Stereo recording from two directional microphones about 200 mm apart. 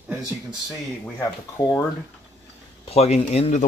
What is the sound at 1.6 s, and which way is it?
Speech, 15° left (ahead or behind).